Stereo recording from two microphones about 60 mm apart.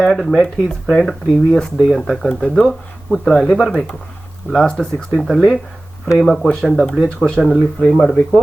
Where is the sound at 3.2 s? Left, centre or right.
Centre.